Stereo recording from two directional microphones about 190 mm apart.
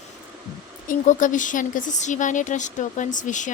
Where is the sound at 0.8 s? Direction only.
40° left (ahead or behind).